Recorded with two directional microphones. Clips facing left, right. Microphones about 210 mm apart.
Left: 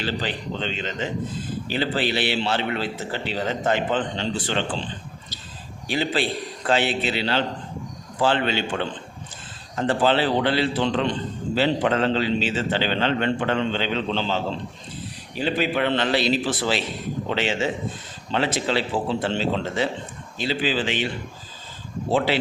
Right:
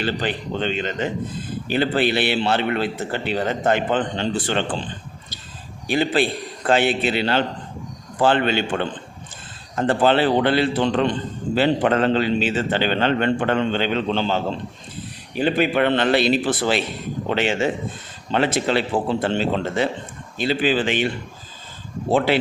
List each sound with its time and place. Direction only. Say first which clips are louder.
0.0 s a man's voice: right 3 dB; 55° right (ahead or behind)
5.9 s a man's voice: right 4 dB; 55° right (ahead or behind)